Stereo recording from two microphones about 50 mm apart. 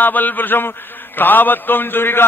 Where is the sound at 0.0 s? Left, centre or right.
Left.